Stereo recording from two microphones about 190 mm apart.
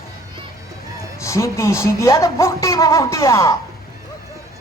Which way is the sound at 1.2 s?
15° left (ahead or behind).